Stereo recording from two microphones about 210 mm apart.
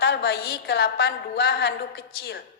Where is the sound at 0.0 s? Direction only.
55° left (ahead or behind).